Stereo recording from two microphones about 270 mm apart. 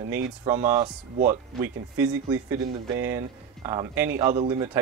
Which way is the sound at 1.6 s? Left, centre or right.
Centre.